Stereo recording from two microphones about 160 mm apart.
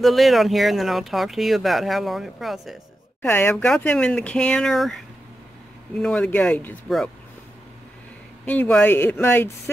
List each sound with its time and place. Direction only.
0.0 s speech: centre (ahead or behind)
3.2 s a woman's voice: 10° left (ahead or behind)
8.5 s speech: 10° left (ahead or behind)